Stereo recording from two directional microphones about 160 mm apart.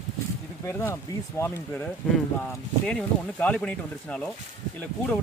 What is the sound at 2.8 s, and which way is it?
Speech, 5° left (ahead or behind).